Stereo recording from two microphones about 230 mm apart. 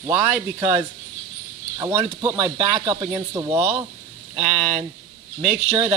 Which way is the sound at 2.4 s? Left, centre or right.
Right.